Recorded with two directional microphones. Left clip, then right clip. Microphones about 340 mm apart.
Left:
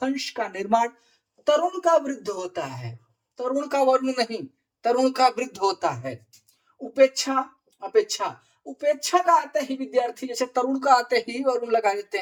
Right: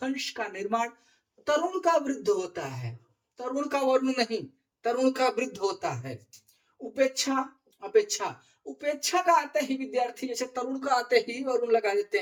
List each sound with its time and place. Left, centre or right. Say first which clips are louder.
0.0 s speech: left 5 dB; centre
3.3 s speech: left 6 dB; centre
8.8 s speech: left 6 dB; centre